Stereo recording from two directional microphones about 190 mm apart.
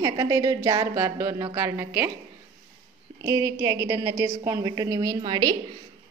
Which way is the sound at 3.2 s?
15° right (ahead or behind).